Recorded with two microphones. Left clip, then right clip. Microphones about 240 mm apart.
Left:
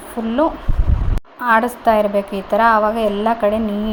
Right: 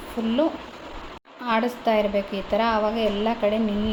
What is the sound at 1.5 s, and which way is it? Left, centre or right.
A woman's voice, centre.